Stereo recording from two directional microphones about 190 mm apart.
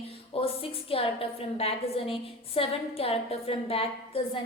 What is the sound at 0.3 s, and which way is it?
A woman's voice, 30° left (ahead or behind).